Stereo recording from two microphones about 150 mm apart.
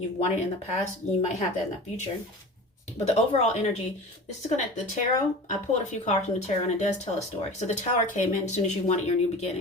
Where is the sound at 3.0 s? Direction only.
45° left (ahead or behind).